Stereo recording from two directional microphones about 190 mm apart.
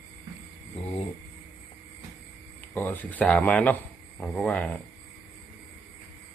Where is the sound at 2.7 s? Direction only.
10° left (ahead or behind).